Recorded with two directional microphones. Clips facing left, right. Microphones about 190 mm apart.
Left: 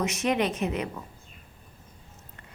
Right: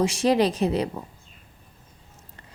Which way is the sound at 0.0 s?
30° right (ahead or behind).